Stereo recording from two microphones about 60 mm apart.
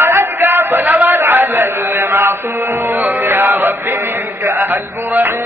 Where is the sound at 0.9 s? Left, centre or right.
Right.